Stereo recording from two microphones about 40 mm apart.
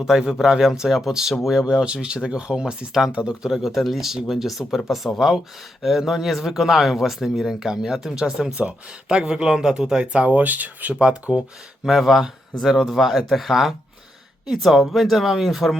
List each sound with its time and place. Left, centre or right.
0.0 s speech: centre
1.6 s speech: right
3.5 s speech: centre; by 10.9 s right
11.0 s speech: right
11.9 s speech: centre